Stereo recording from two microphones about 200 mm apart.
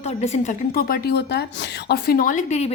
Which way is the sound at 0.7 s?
50° left (ahead or behind).